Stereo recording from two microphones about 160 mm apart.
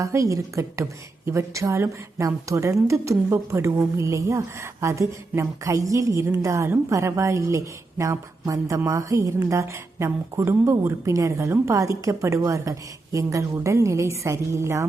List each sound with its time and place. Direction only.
0.0 s a woman's voice: 20° right (ahead or behind)